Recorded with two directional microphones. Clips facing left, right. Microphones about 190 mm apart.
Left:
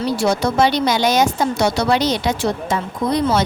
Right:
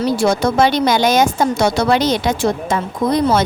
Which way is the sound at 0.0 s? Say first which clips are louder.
Right 3 dB; 50° right (ahead or behind).